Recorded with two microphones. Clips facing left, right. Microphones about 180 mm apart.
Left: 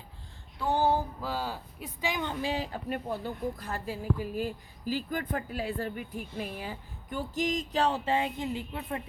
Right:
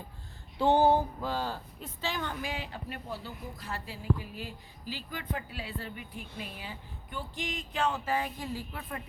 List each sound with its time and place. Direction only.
0.6 s a sound: 20° right (ahead or behind)
1.2 s speech: 10° left (ahead or behind); by 2.6 s 30° left (ahead or behind)
2.7 s speech: 50° left (ahead or behind); by 9.0 s 25° left (ahead or behind)